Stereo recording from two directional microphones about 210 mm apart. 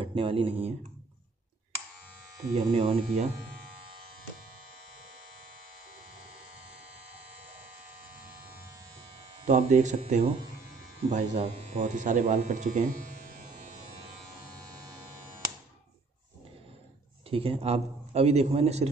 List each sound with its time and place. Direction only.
0.0 s speech: 25° right (ahead or behind)
2.5 s a man's voice: 30° right (ahead or behind)
9.5 s speech: 35° right (ahead or behind)
17.3 s a man's voice: 25° right (ahead or behind)